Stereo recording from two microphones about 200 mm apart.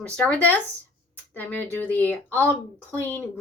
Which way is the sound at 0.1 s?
5° left (ahead or behind).